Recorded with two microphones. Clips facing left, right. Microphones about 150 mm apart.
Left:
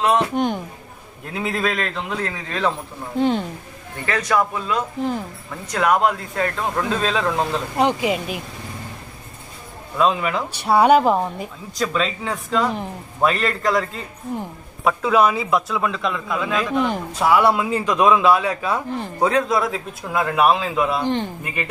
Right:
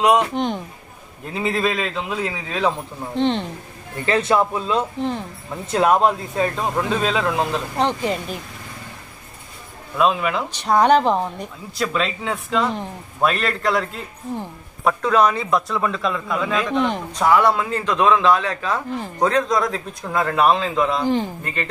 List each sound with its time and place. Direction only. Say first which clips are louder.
0.3 s a man's voice: left 2 dB; 5° left (ahead or behind)
3.2 s a man's voice: left 1 dB; 5° left (ahead or behind)
4.0 s speech: right 2 dB; 25° right (ahead or behind); by 7.6 s 5° right (ahead or behind)
7.7 s a man's voice: left 4 dB; 10° left (ahead or behind)
9.9 s a man's voice: even; centre (ahead or behind)
10.5 s a man's voice: left 1 dB; 10° left (ahead or behind)
21.0 s a man's voice: right 2 dB; 5° right (ahead or behind)
21.4 s a man's voice: even; 10° left (ahead or behind)